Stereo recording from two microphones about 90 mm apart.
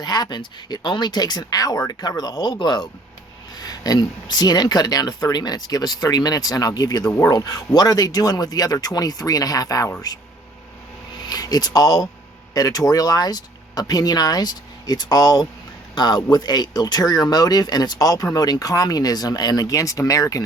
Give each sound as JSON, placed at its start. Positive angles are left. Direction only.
{"t": 0.0, "sound": "speech", "side_deg": 50}
{"t": 11.2, "sound": "speech", "side_deg": 45}